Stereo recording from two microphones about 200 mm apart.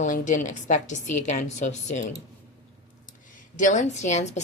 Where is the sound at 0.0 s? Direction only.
40° left (ahead or behind).